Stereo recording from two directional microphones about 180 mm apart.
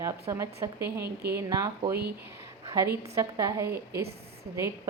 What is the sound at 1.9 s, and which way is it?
Speech, 60° right (ahead or behind).